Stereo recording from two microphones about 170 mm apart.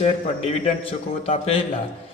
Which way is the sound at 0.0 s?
35° left (ahead or behind).